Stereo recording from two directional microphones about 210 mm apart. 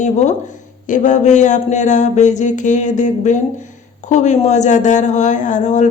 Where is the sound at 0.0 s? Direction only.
35° left (ahead or behind).